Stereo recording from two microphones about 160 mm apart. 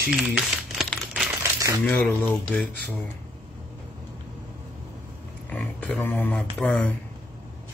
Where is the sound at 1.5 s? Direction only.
20° right (ahead or behind).